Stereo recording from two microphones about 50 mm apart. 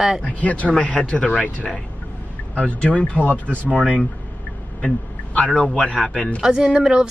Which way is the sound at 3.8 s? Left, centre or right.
Centre.